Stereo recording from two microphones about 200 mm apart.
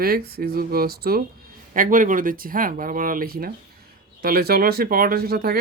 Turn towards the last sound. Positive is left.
turn(degrees=-50)  # may be behind; listen again after turning